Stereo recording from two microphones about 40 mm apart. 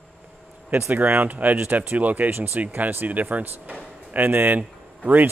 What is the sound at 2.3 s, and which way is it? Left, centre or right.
Speech, right.